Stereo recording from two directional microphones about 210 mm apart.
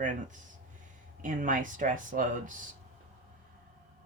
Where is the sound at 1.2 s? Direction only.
40° right (ahead or behind).